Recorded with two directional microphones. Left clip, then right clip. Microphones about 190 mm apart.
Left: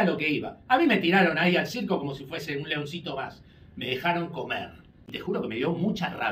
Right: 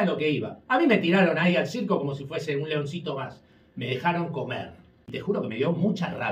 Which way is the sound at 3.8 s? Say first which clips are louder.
Right 1 dB; 20° right (ahead or behind).